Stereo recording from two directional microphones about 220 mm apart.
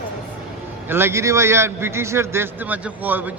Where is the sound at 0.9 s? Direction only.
10° right (ahead or behind).